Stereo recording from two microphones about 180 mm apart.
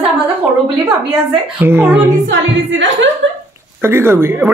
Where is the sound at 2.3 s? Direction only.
90° right.